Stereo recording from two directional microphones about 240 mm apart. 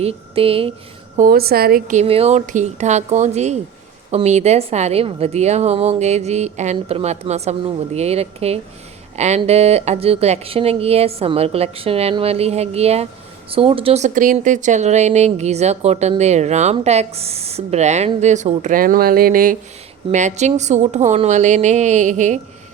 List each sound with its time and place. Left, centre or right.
0.0 s speech: right
1.1 s speech: right